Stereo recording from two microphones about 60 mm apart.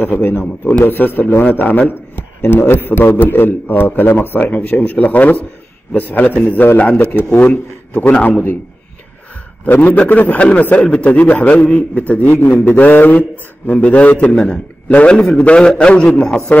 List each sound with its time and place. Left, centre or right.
0.0 s a man's voice: left
9.7 s a man's voice: left
12.1 s a man's voice: left; by 16.3 s centre